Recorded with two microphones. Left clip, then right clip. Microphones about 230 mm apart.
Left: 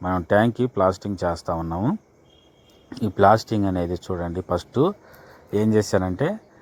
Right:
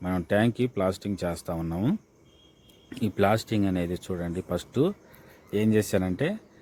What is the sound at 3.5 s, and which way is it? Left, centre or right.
Speech, centre.